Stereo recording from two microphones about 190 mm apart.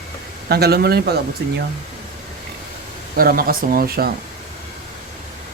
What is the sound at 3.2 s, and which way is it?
Speech, 50° right (ahead or behind).